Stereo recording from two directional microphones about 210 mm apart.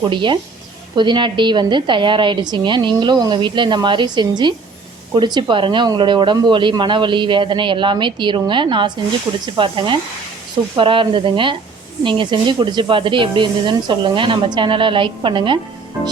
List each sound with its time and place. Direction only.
0.0 s a woman's voice: 20° right (ahead or behind)